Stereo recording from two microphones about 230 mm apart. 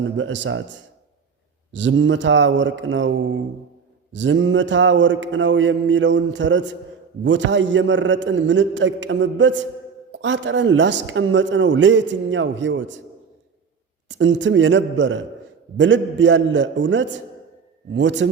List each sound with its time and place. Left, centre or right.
0.0 s speech: right
14.1 s speech: right